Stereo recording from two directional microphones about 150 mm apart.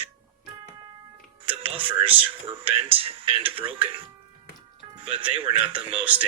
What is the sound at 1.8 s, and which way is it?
A man's voice, 35° right (ahead or behind).